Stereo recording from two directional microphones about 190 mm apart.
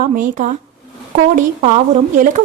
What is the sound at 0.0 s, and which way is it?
A woman's voice, 45° right (ahead or behind).